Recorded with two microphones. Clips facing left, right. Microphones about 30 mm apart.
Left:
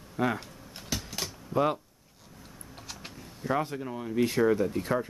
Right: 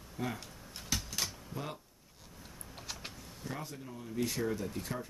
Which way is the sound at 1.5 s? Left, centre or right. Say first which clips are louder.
Left 15 dB; left.